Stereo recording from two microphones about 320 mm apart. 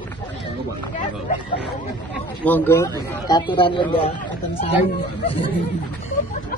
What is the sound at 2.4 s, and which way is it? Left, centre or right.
A man's voice, centre.